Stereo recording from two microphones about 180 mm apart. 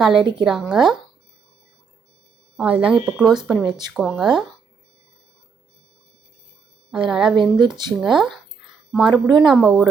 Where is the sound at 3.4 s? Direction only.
25° right (ahead or behind).